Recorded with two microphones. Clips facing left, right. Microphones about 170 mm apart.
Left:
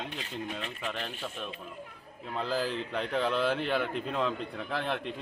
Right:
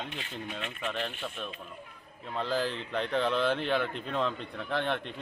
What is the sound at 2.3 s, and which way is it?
Speech, 5° left (ahead or behind).